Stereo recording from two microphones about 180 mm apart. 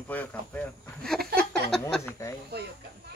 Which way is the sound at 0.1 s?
10° left (ahead or behind).